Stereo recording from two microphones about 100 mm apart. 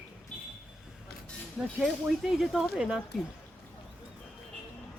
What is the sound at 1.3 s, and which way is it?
Speech, 5° left (ahead or behind).